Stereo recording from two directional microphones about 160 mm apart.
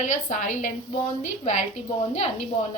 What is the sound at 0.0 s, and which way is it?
Speech, 50° left (ahead or behind).